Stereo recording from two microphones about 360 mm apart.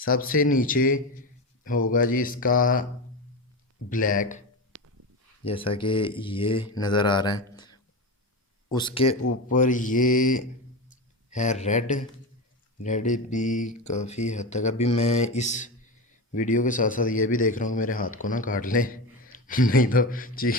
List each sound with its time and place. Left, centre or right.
0.1 s a man's voice: left
3.8 s a man's voice: left
4.7 s a sound: right
5.5 s a man's voice: centre
10.8 s a sound: centre
12.8 s a man's voice: centre